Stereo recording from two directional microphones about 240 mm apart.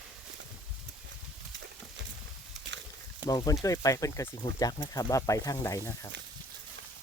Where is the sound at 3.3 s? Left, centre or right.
Centre.